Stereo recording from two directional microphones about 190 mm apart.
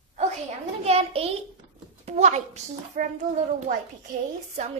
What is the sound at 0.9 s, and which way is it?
A child's voice, 30° right (ahead or behind).